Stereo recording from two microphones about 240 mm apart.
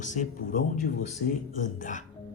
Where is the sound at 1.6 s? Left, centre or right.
Left.